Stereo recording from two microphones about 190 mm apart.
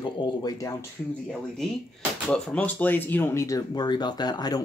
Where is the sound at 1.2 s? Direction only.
Centre (ahead or behind).